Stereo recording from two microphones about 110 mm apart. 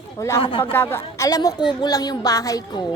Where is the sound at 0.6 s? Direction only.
20° left (ahead or behind).